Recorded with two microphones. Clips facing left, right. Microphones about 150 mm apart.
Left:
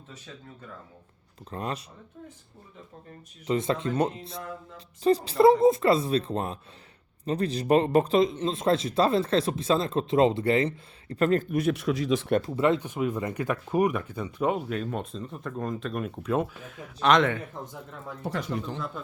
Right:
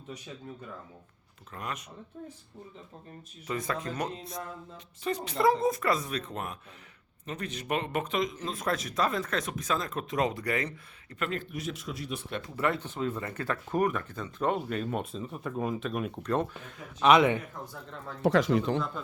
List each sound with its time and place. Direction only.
1.5 s speech: 30° left (ahead or behind)
3.4 s speech: 25° left (ahead or behind); by 12.3 s 90° left
12.5 s speech: 20° left (ahead or behind)
17.0 s a man's voice: 10° right (ahead or behind)
18.2 s speech: 90° right